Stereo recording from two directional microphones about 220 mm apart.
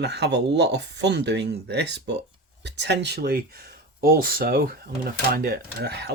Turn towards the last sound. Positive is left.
turn(degrees=-50)  # may be behind; listen again after turning